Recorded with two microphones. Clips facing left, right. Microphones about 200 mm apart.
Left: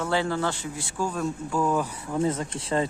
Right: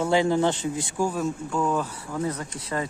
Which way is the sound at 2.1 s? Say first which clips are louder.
Left 4 dB; 25° left (ahead or behind).